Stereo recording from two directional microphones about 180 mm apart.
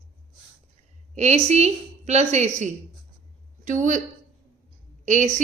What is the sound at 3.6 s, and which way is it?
Speech, 45° right (ahead or behind).